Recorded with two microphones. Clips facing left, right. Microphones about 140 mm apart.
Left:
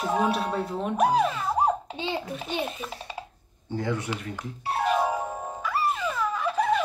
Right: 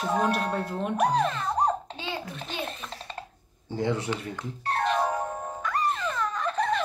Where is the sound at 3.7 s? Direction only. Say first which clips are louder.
Right 1 dB; 25° right (ahead or behind).